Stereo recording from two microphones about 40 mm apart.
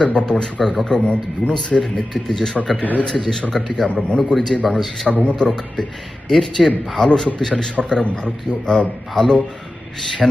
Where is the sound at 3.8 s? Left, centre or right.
Left.